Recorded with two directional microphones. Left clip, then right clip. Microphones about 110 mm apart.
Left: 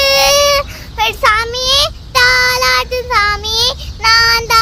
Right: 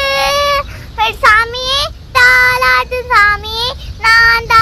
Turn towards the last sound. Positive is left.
turn(degrees=25)  # may be behind; listen again after turning